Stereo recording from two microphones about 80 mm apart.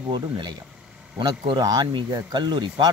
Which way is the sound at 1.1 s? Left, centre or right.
Right.